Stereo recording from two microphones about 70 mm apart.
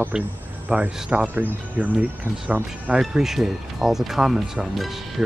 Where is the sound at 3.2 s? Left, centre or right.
Centre.